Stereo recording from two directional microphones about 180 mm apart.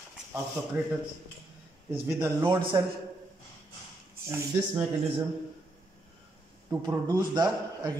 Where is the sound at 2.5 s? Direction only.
25° right (ahead or behind).